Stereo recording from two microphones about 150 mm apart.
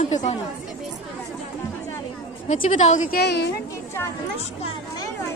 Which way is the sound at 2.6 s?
55° left (ahead or behind).